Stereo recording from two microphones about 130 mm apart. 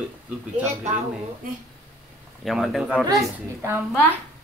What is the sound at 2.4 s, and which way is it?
Speech, centre (ahead or behind).